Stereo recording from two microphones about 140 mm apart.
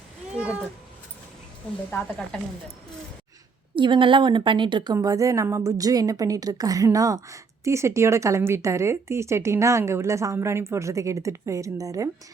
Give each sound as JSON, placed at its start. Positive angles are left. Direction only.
{"t": 0.3, "sound": "cat", "side_deg": -10}
{"t": 1.9, "sound": "speech", "side_deg": 15}
{"t": 3.8, "sound": "a woman's voice", "side_deg": -35}